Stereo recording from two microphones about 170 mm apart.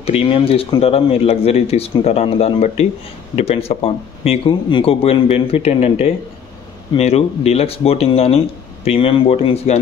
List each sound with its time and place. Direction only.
0.0 s speech: 35° left (ahead or behind)